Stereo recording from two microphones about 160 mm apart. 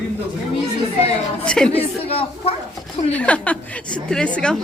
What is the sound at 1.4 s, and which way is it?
Speech, 5° left (ahead or behind).